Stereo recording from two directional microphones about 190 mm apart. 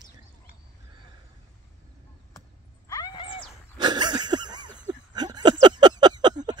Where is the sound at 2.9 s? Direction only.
20° left (ahead or behind).